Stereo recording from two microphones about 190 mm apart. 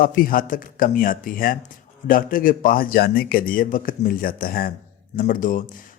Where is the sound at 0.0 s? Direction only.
45° left (ahead or behind).